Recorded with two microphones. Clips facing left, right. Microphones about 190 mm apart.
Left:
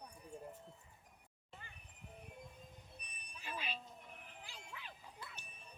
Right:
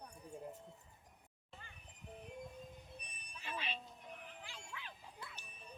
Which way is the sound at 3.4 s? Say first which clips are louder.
Right 1 dB; 5° left (ahead or behind).